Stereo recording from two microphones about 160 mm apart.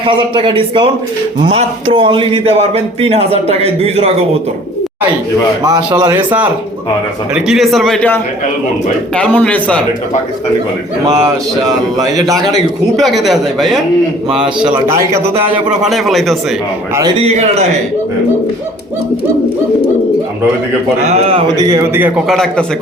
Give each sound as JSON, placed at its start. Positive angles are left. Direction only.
{"t": 0.0, "sound": "speech", "side_deg": -30}
{"t": 5.6, "sound": "a man's voice", "side_deg": -25}
{"t": 7.4, "sound": "a man's voice", "side_deg": 0}
{"t": 11.9, "sound": "a man's voice", "side_deg": -20}
{"t": 13.0, "sound": "speech", "side_deg": 0}
{"t": 15.8, "sound": "speech", "side_deg": 0}
{"t": 17.2, "sound": "speech", "side_deg": -40}
{"t": 21.1, "sound": "speech", "side_deg": -40}
{"t": 21.4, "sound": "a man's voice", "side_deg": -25}
{"t": 22.3, "sound": "speech", "side_deg": 5}